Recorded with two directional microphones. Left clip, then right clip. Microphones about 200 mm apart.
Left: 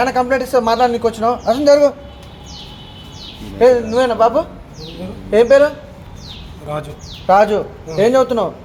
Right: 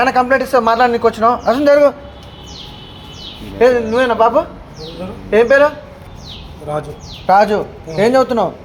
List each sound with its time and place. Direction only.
0.0 s a man's voice: 15° right (ahead or behind)
3.6 s a man's voice: 10° right (ahead or behind)
7.3 s a man's voice: 15° right (ahead or behind)